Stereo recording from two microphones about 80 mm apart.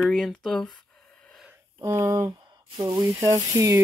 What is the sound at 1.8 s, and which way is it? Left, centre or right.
Speech, right.